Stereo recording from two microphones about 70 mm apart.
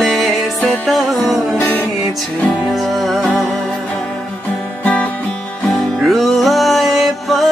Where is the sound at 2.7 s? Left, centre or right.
Centre.